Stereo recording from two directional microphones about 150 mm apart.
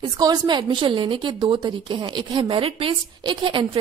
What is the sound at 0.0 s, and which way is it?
A woman's voice, 30° right (ahead or behind).